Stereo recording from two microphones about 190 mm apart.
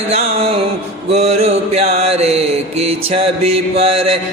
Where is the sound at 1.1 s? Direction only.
35° right (ahead or behind).